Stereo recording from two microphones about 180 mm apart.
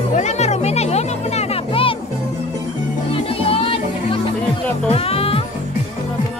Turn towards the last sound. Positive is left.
turn(degrees=35)  # may be behind; listen again after turning